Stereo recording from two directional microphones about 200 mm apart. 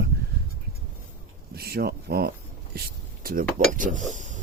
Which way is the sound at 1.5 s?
50° right (ahead or behind).